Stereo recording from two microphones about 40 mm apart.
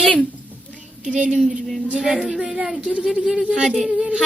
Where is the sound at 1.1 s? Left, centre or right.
Right.